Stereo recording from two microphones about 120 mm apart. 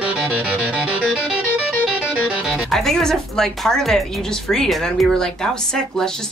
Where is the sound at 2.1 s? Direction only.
10° right (ahead or behind).